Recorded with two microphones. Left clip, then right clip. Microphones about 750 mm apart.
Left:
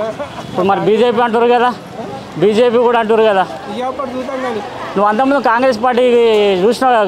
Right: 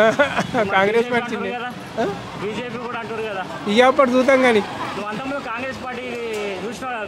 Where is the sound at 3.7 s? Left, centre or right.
Right.